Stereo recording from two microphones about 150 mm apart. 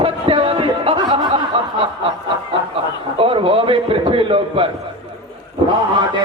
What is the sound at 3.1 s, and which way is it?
A man's voice, 35° right (ahead or behind).